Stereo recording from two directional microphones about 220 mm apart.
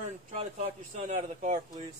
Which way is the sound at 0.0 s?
30° right (ahead or behind).